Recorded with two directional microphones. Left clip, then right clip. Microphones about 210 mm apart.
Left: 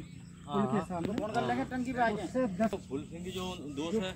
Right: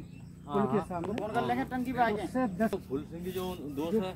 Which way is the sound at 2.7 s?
55° right (ahead or behind).